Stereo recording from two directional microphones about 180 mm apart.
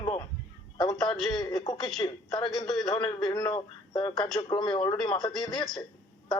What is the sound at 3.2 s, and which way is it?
Speech, 25° left (ahead or behind).